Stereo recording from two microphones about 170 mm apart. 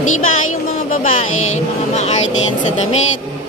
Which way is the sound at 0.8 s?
50° left (ahead or behind).